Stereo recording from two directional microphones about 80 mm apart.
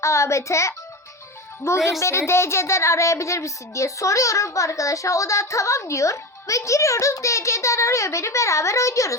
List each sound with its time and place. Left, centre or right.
0.0 s child singing: left